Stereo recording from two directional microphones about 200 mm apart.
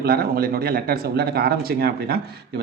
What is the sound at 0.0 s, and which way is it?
Speech, 50° right (ahead or behind).